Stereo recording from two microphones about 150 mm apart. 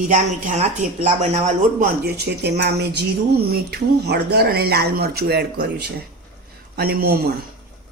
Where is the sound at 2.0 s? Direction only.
90° right.